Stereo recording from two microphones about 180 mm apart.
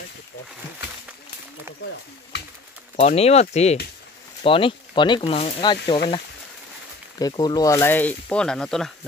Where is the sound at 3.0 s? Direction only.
35° left (ahead or behind).